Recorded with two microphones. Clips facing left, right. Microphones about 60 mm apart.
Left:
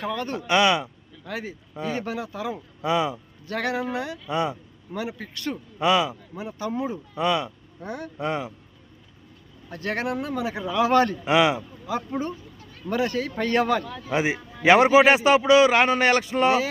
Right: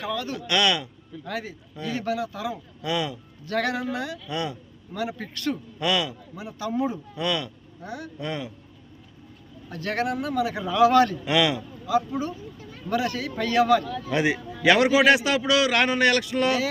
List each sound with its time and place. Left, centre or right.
0.0 s a man's voice: left
0.5 s speech: left
7.9 s speech: left
8.2 s speech: left
9.6 s speech: left
11.9 s a man's voice: left
13.8 s a man's voice: centre
14.6 s a man's voice: left